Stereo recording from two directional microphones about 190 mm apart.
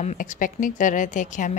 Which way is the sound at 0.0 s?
40° left (ahead or behind).